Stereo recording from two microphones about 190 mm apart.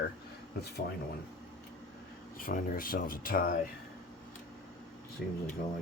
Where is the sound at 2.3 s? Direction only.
50° left (ahead or behind).